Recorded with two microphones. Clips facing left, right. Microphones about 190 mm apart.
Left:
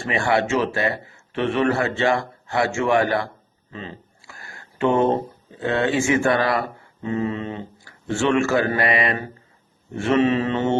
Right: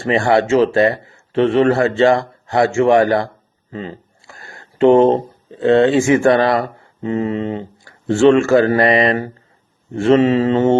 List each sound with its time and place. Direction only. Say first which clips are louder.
0.0 s speech: right 6 dB; 40° right (ahead or behind)
3.7 s a sound: right 7 dB; 30° right (ahead or behind)
4.9 s speech: right 8 dB; 25° right (ahead or behind)
7.0 s speech: right 5 dB; 25° right (ahead or behind)
8.4 s speech: right 8 dB; 40° right (ahead or behind)
10.1 s speech: right 6 dB; 25° right (ahead or behind)